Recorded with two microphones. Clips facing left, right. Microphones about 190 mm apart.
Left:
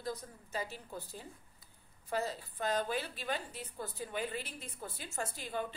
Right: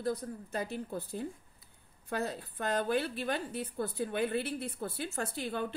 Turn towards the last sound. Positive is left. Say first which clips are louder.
# right 4 dB
turn(degrees=-65)  # may be behind; listen again after turning